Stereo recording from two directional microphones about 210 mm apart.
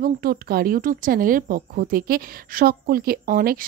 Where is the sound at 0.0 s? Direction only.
45° right (ahead or behind).